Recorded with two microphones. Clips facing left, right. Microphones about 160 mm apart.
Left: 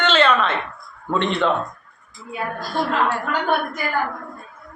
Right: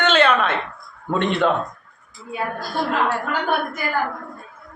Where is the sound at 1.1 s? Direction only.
55° right (ahead or behind).